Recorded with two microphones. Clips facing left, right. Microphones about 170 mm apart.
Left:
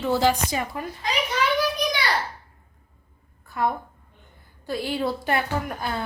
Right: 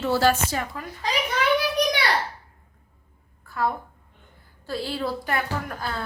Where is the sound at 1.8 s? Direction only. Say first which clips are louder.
Right 3 dB; 65° right (ahead or behind).